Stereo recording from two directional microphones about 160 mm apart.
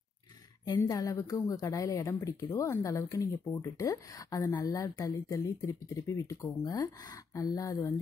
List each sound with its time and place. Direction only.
0.7 s a woman's voice: 20° left (ahead or behind)